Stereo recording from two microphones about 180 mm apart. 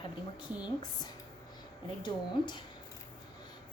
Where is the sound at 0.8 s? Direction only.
20° left (ahead or behind).